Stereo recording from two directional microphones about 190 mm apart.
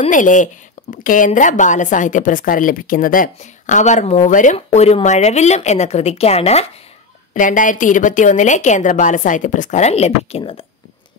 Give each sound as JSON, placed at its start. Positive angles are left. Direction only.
{"t": 0.1, "sound": "a woman's voice", "side_deg": 45}